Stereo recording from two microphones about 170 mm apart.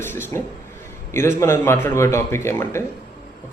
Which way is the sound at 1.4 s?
15° left (ahead or behind).